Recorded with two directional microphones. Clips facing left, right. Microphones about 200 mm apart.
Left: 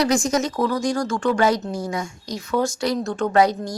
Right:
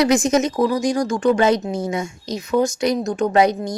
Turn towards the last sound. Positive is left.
turn(degrees=-20)  # may be behind; listen again after turning